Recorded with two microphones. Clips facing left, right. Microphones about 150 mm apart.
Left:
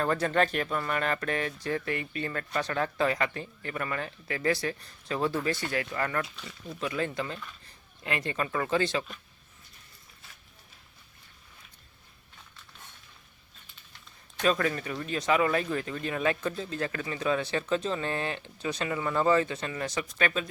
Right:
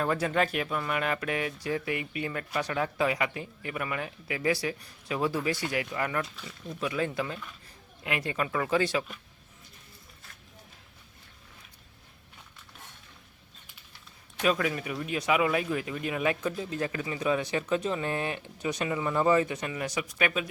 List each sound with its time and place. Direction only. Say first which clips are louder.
0.0 s speech: left 1 dB; 10° right (ahead or behind)
6.3 s speech: right 1 dB; centre (ahead or behind)
14.4 s speech: even; 10° right (ahead or behind)